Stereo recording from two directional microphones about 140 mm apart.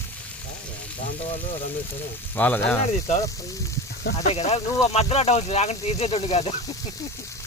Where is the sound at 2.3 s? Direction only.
10° left (ahead or behind).